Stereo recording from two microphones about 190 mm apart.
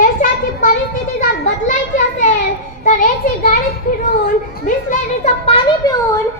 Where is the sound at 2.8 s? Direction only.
45° left (ahead or behind).